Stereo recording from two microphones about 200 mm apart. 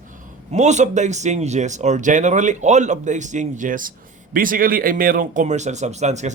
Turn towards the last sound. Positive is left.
turn(degrees=-35)  # may be behind; listen again after turning